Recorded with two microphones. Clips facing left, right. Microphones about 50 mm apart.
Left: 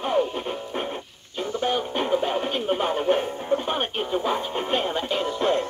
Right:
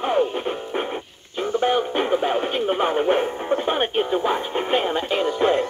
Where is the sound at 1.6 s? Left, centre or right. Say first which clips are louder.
Right 4 dB; centre.